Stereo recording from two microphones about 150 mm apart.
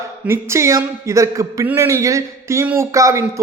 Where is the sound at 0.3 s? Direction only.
20° right (ahead or behind).